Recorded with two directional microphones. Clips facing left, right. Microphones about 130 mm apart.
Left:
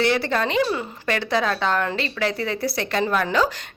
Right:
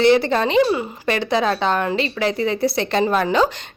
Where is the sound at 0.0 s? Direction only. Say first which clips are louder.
Right 6 dB; 20° right (ahead or behind).